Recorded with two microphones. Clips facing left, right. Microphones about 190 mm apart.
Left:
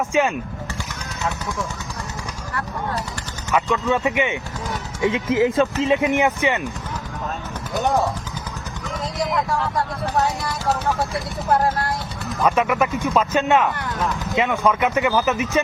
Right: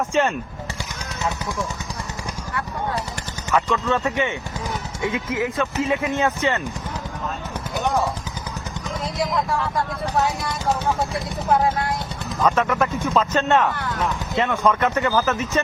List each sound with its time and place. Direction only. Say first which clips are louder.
0.1 s speech: left 1 dB; 5° left (ahead or behind)
3.5 s speech: left 1 dB; 10° left (ahead or behind)
9.1 s speech: left 1 dB; centre (ahead or behind)
12.4 s speech: left 1 dB; 10° left (ahead or behind)
14.9 s speech: left 1 dB; 15° left (ahead or behind)